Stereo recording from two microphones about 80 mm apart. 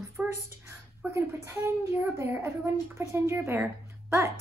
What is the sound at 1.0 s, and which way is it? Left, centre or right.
A woman's voice, right.